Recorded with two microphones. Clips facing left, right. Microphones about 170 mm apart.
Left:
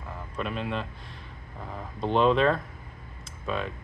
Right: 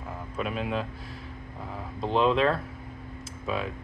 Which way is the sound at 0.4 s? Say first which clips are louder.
Right 1 dB; 5° right (ahead or behind).